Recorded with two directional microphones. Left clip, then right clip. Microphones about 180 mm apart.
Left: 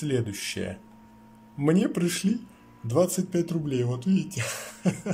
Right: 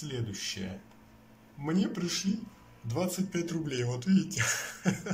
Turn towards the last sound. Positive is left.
turn(degrees=20)  # may be behind; listen again after turning